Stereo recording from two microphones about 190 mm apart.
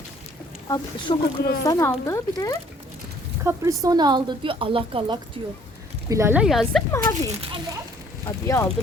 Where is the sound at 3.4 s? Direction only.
15° right (ahead or behind).